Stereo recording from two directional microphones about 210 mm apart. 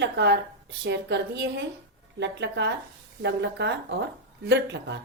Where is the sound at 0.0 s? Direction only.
55° right (ahead or behind).